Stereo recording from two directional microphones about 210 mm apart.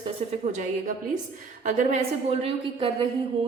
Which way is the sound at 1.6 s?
40° right (ahead or behind).